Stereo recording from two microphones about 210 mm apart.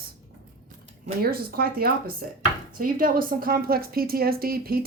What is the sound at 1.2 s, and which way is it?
Speech, 45° right (ahead or behind).